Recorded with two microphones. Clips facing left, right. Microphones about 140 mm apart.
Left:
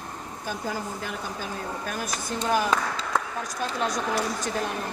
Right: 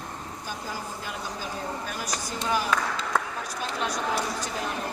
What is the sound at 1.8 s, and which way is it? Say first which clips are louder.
Speech: left 2 dB; 50° left (ahead or behind).